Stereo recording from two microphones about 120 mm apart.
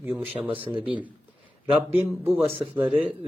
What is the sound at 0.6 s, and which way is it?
Speech, 45° right (ahead or behind).